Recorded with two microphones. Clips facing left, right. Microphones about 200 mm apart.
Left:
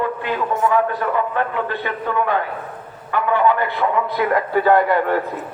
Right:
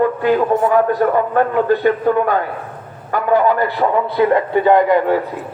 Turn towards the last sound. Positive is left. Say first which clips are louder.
# right 3 dB
turn(degrees=-15)  # may be behind; listen again after turning